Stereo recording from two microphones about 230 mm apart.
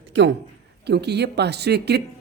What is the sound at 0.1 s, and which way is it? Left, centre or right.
A man's voice, right.